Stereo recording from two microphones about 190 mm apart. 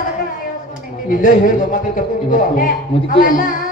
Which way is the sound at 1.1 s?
45° left (ahead or behind).